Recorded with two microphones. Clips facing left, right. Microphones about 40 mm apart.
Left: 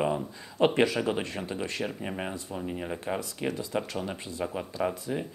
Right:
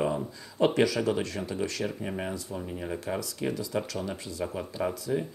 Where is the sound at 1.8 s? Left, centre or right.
Centre.